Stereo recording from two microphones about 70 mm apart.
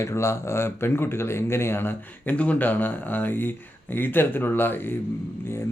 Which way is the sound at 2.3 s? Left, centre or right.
Centre.